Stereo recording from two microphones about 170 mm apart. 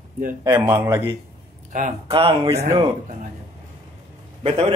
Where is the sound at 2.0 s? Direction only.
35° right (ahead or behind).